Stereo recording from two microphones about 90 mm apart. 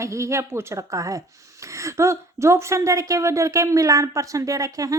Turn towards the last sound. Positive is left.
turn(degrees=-40)  # may be behind; listen again after turning